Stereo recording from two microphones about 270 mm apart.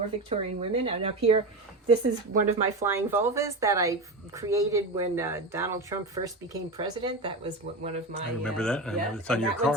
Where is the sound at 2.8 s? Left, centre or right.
Centre.